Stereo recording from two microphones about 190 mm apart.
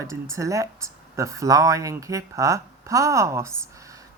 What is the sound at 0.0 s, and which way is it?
Speech, 15° right (ahead or behind).